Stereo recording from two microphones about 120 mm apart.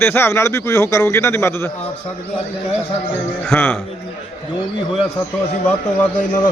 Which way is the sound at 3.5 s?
15° left (ahead or behind).